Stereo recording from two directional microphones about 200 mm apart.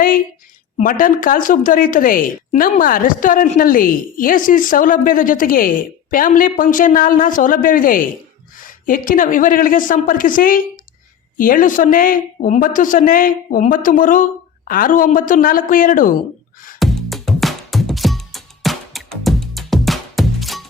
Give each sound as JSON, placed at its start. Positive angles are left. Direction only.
{"t": 0.8, "sound": "a woman's voice", "side_deg": 45}
{"t": 16.8, "sound": "music", "side_deg": 0}